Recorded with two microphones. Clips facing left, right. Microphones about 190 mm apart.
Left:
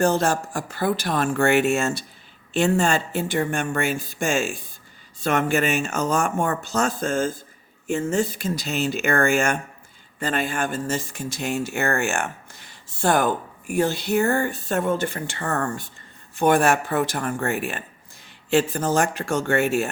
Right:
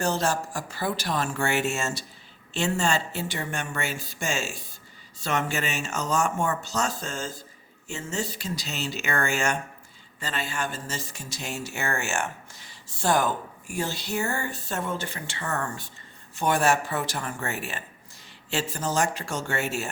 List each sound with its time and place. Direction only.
0.0 s speech: 55° left (ahead or behind)